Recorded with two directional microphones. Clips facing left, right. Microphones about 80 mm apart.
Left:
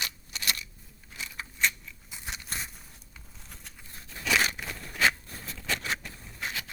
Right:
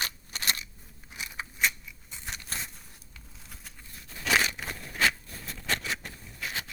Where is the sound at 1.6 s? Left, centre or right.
Centre.